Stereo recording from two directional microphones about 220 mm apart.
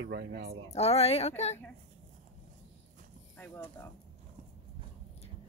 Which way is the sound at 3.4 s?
10° left (ahead or behind).